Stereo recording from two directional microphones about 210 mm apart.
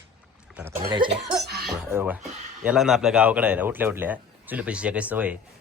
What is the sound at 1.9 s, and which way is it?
Speech, 10° right (ahead or behind).